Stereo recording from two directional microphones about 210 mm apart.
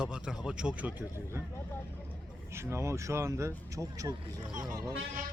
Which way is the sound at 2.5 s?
15° right (ahead or behind).